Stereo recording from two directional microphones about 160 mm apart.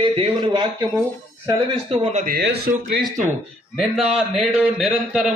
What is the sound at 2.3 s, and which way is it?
Speech, 90° right.